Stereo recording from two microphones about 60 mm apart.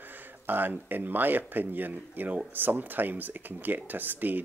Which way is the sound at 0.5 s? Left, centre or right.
Right.